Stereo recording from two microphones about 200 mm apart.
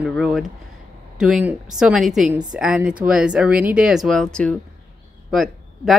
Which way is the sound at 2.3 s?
20° right (ahead or behind).